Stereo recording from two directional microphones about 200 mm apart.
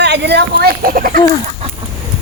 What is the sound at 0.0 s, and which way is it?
Speech, 60° right (ahead or behind).